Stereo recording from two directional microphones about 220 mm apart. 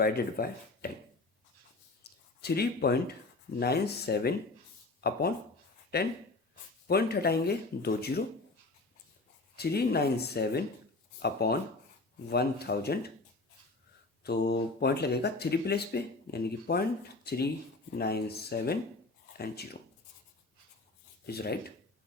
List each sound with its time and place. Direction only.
0.0 s speech: 45° left (ahead or behind)
2.0 s a sound: 45° left (ahead or behind)
2.4 s speech: 45° left (ahead or behind)
9.6 s speech: 45° left (ahead or behind)
14.3 s speech: 45° left (ahead or behind)
21.2 s speech: 45° left (ahead or behind)